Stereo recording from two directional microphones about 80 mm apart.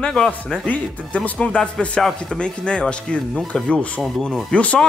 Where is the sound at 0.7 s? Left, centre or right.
Centre.